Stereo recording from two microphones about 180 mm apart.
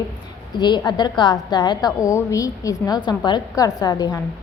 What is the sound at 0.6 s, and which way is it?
A woman's voice, 25° left (ahead or behind).